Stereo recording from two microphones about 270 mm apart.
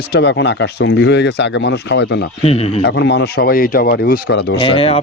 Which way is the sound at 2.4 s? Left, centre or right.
Left.